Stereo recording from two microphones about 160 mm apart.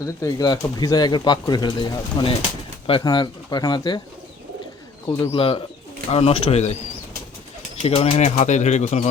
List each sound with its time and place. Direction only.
0.0 s speech: 20° left (ahead or behind)
5.0 s speech: 30° left (ahead or behind)
7.8 s speech: 40° left (ahead or behind)